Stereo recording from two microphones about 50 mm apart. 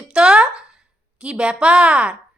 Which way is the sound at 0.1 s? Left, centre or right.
Centre.